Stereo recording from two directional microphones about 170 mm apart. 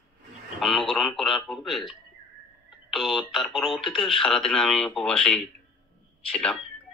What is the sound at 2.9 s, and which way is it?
Speech, centre (ahead or behind).